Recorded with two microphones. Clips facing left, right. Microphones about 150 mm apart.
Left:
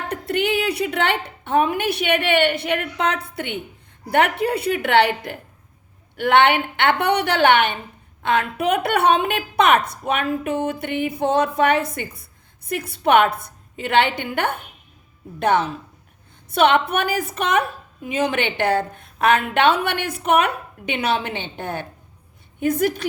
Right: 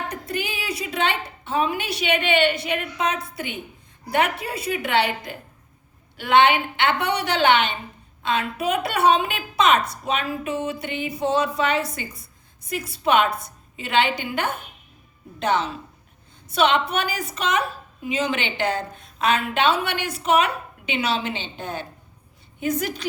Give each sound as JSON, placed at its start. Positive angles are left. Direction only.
{"t": 0.1, "sound": "a woman's voice", "side_deg": 65}